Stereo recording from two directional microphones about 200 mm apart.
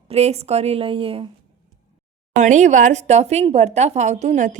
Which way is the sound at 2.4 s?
35° right (ahead or behind).